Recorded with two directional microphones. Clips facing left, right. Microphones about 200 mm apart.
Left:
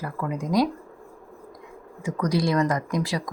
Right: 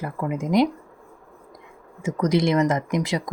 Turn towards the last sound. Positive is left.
turn(degrees=-20)  # may be behind; listen again after turning